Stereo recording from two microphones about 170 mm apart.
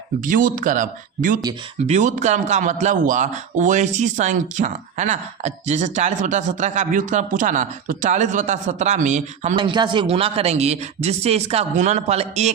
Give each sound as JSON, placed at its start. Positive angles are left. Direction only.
{"t": 0.3, "sound": "speech", "side_deg": -50}
{"t": 9.6, "sound": "speech", "side_deg": -25}